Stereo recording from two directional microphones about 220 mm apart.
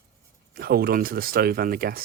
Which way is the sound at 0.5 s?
45° right (ahead or behind).